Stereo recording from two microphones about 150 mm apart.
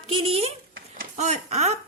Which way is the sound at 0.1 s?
40° right (ahead or behind).